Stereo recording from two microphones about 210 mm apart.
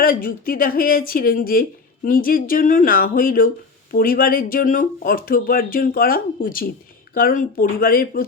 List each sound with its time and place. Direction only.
0.0 s speech: 40° left (ahead or behind)